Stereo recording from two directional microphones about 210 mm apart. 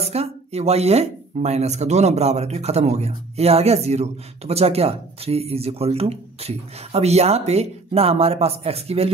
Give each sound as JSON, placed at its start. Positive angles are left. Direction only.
{"t": 0.0, "sound": "speech", "side_deg": -30}